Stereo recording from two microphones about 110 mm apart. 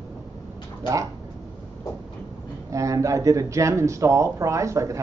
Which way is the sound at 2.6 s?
30° right (ahead or behind).